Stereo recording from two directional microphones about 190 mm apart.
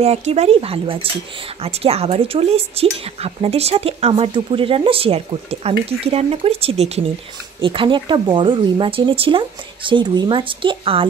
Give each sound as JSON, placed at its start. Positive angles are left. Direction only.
{"t": 0.0, "sound": "a woman's voice", "side_deg": -35}